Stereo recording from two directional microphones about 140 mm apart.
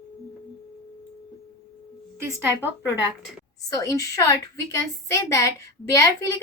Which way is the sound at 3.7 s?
25° left (ahead or behind).